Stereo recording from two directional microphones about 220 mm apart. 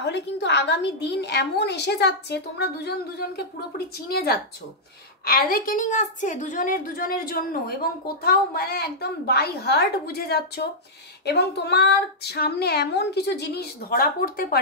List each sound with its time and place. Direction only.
0.0 s a woman's voice: 50° left (ahead or behind)